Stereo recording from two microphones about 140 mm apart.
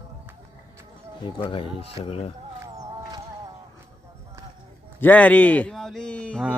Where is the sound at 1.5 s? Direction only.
40° left (ahead or behind).